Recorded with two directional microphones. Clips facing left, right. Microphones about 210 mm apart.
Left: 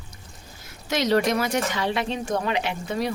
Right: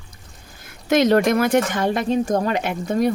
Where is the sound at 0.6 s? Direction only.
55° right (ahead or behind).